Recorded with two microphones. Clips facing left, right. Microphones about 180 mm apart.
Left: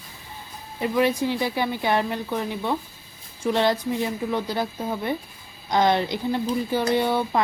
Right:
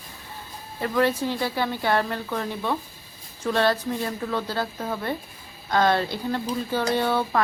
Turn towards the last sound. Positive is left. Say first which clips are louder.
# left 1 dB
turn(degrees=15)  # may be behind; listen again after turning